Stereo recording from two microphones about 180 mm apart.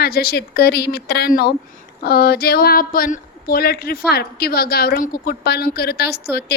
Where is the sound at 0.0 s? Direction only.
60° left (ahead or behind).